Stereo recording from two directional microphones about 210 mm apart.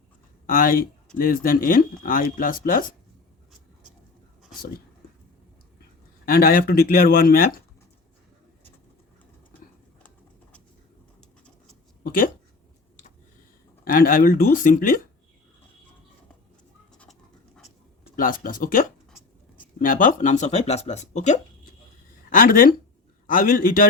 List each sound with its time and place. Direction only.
0.4 s speech: 45° left (ahead or behind)
6.2 s speech: 45° left (ahead or behind)
11.2 s pigeon: centre (ahead or behind)
12.0 s speech: 40° left (ahead or behind)
13.8 s speech: 45° left (ahead or behind)
18.2 s speech: 40° left (ahead or behind)